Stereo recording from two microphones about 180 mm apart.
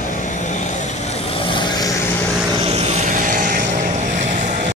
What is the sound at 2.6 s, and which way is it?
Vehicle, 40° right (ahead or behind).